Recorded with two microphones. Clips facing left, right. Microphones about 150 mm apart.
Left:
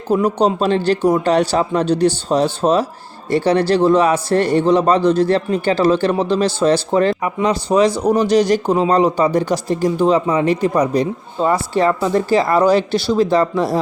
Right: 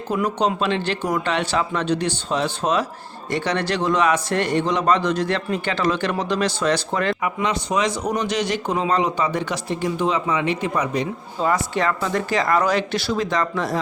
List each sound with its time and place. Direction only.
0.1 s speech: 35° left (ahead or behind)